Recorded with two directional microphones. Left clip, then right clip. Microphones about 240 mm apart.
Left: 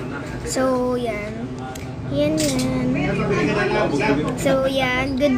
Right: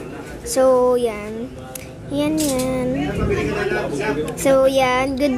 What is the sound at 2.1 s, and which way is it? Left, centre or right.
Child singing, right.